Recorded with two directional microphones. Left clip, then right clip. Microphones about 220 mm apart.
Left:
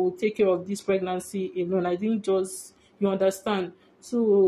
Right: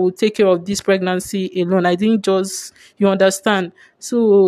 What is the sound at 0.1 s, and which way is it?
Speech, 50° right (ahead or behind).